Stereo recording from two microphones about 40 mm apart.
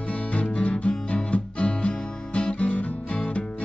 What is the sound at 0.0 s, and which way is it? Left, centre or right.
Music, left.